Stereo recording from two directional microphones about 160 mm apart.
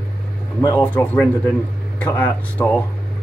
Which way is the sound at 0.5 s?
20° left (ahead or behind).